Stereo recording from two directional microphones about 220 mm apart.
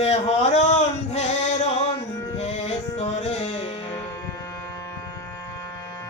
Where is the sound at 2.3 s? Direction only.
30° left (ahead or behind).